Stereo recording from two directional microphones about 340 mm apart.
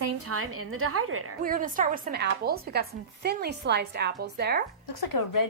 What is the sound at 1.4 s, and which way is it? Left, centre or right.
Speech, right.